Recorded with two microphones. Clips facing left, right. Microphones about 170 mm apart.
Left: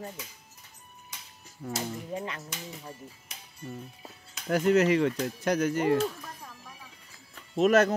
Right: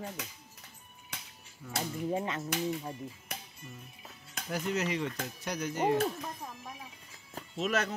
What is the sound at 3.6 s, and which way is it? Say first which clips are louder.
Speech: left 9 dB; 35° left (ahead or behind).